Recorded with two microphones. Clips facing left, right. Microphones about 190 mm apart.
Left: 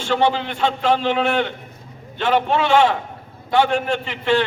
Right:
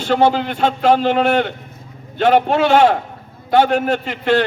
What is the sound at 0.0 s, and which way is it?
A man's voice, 40° right (ahead or behind).